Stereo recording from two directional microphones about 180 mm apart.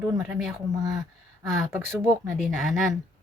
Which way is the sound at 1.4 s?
Centre (ahead or behind).